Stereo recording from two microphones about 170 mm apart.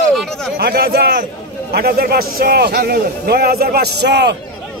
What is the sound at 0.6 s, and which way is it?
A man's voice, 65° right (ahead or behind).